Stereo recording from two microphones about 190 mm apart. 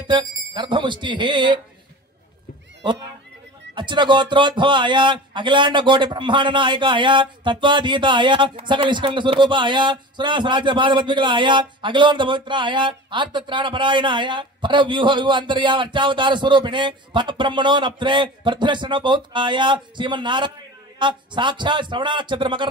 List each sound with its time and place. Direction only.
0.0 s speech: 25° right (ahead or behind)
3.7 s speech: 25° right (ahead or behind)